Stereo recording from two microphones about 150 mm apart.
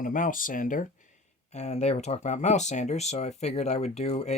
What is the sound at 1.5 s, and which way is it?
Speech, 45° left (ahead or behind).